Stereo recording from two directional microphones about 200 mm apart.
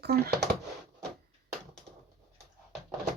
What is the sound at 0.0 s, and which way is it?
Speech, 55° right (ahead or behind).